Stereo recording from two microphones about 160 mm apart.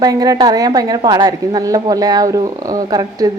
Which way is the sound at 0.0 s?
25° right (ahead or behind).